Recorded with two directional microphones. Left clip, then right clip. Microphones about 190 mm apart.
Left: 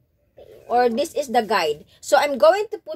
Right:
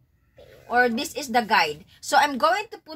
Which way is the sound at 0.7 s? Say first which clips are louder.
Left 3 dB; 5° left (ahead or behind).